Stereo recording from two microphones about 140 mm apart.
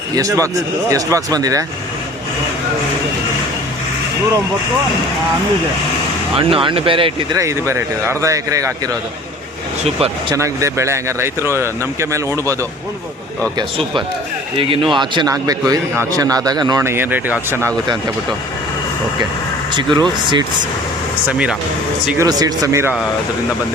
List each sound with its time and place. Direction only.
0.2 s speech: 25° right (ahead or behind)
6.3 s speech: 40° right (ahead or behind)
7.3 s speech: 20° right (ahead or behind)
9.8 s speech: 45° right (ahead or behind)
10.3 s speech: 20° right (ahead or behind)
14.6 s speech: 40° right (ahead or behind)
16.8 s speech: 15° right (ahead or behind)
19.7 s speech: 35° right (ahead or behind)
22.2 s speech: 25° right (ahead or behind)